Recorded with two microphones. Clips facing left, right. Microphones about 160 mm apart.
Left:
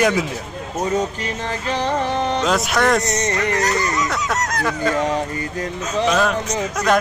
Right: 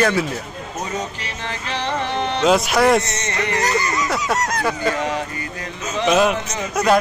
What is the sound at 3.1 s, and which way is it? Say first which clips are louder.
Speech: left 6 dB; 40° left (ahead or behind).